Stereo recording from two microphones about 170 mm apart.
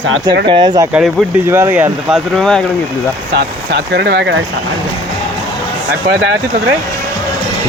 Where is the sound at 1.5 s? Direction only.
15° right (ahead or behind).